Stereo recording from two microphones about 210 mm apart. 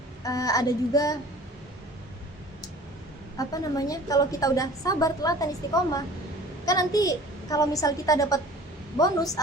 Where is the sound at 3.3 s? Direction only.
15° left (ahead or behind).